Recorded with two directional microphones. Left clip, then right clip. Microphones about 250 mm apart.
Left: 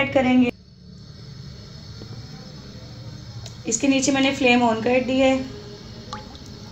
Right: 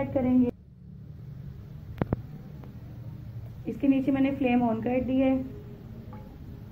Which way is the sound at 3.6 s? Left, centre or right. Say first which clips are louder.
Left 6 dB; centre.